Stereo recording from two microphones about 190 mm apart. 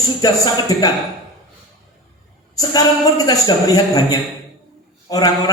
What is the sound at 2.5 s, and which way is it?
Speech, 20° left (ahead or behind).